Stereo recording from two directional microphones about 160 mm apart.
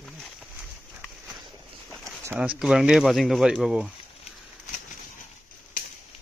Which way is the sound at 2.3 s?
5° right (ahead or behind).